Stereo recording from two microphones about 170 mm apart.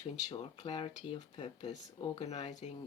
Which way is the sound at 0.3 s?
35° left (ahead or behind).